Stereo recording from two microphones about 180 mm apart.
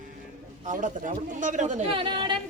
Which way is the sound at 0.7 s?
45° right (ahead or behind).